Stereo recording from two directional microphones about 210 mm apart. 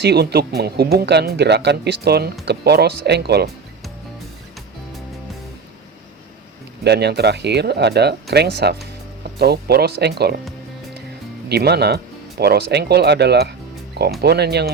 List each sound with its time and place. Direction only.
0.0 s speech: 50° right (ahead or behind)
6.8 s speech: 50° right (ahead or behind)
11.4 s speech: 50° right (ahead or behind)